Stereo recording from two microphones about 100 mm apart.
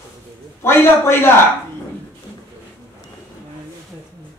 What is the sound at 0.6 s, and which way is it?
Speech, 25° left (ahead or behind).